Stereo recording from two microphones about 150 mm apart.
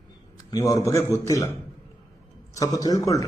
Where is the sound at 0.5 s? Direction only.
20° left (ahead or behind).